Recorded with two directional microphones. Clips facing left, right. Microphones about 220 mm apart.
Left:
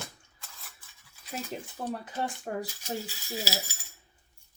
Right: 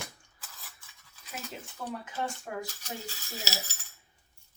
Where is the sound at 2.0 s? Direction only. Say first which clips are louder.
Left 2 dB; 35° left (ahead or behind).